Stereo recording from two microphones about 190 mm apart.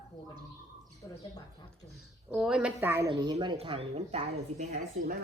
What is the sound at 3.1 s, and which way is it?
A woman's voice, 25° right (ahead or behind).